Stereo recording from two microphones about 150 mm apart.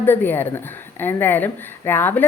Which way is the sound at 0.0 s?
15° left (ahead or behind).